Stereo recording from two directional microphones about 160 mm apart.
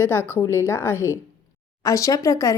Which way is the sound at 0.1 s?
15° left (ahead or behind).